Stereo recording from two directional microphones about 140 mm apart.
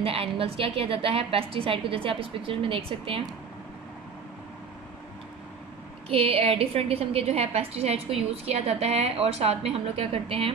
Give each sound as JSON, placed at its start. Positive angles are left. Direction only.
{"t": 0.0, "sound": "a woman's voice", "side_deg": -40}
{"t": 6.0, "sound": "a woman's voice", "side_deg": -45}